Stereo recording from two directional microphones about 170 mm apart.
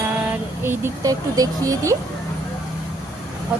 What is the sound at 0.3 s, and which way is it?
Speech, 15° right (ahead or behind).